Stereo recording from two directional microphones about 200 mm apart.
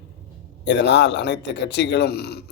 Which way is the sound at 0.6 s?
60° left (ahead or behind).